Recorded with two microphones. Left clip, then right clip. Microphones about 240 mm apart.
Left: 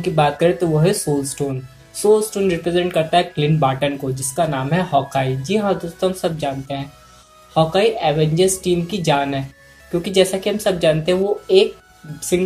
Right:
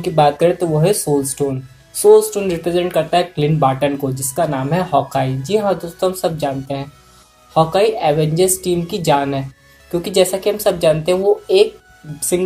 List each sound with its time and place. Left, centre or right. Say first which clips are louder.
0.0 s speech: right 3 dB; centre